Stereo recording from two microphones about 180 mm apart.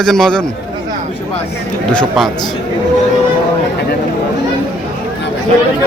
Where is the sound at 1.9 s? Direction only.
5° left (ahead or behind).